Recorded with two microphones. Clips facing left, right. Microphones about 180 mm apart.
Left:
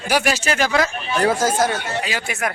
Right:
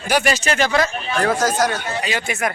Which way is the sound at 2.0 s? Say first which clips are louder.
Right 2 dB; 5° left (ahead or behind).